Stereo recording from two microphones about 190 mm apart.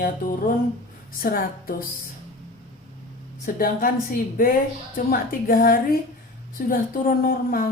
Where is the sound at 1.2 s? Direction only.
50° left (ahead or behind).